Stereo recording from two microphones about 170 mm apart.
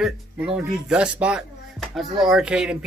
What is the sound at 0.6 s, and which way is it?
A child's voice, 5° right (ahead or behind).